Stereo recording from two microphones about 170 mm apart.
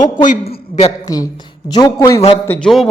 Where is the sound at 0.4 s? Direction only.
35° left (ahead or behind).